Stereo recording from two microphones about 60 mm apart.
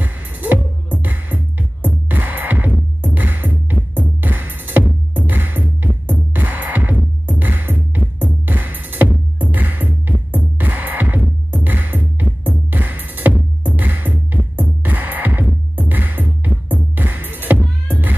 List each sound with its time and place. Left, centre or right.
0.0 s music: right